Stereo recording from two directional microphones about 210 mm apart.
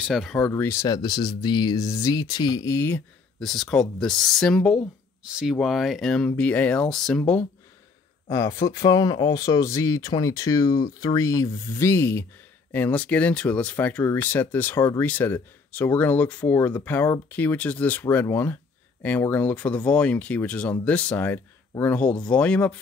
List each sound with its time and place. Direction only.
0.0 s speech: centre (ahead or behind)
8.3 s speech: 15° left (ahead or behind)